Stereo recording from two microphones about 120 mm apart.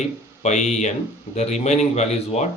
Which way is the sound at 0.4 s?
75° left (ahead or behind).